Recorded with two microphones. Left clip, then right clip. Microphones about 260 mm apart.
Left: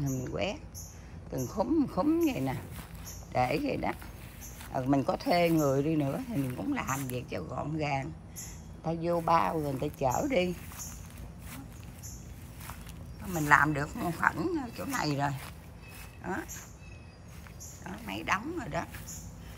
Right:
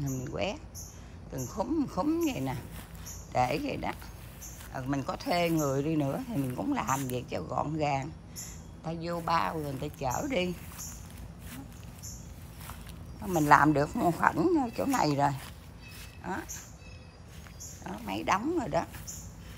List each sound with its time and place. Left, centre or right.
0.0 s a sound: centre
1.3 s a man's voice: centre
13.4 s speech: centre
17.8 s speech: centre